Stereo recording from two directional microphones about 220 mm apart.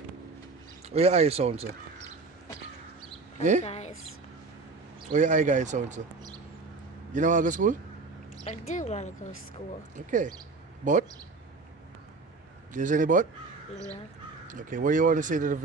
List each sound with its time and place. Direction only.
0.8 s speech: 30° right (ahead or behind)
3.6 s speech: 30° left (ahead or behind)
5.1 s speech: 35° right (ahead or behind)
7.2 s speech: 35° right (ahead or behind)
8.5 s speech: 30° left (ahead or behind)
9.9 s speech: 35° right (ahead or behind)
12.7 s speech: 35° right (ahead or behind)
14.5 s speech: 35° right (ahead or behind)